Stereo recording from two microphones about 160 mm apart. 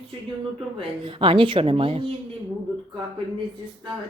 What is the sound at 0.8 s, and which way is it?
A woman's voice, 35° right (ahead or behind).